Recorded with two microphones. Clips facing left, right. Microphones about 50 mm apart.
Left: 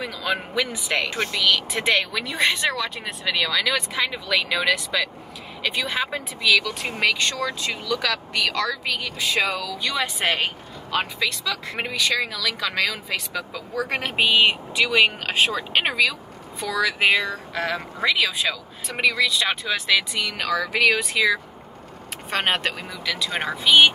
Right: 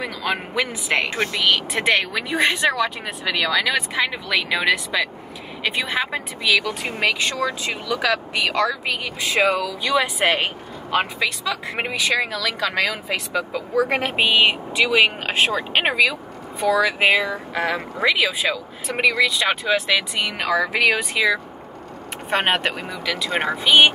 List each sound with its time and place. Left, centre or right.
0.0 s speech: right
1.4 s speech: centre
15.5 s speech: centre
20.7 s speech: centre